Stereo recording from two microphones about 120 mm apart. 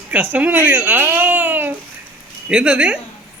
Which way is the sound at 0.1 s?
15° right (ahead or behind).